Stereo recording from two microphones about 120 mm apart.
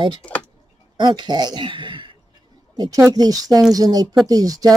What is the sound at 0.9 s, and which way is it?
Speech, 40° right (ahead or behind).